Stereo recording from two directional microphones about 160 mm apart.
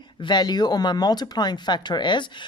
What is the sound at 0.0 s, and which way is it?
Speech, 30° left (ahead or behind).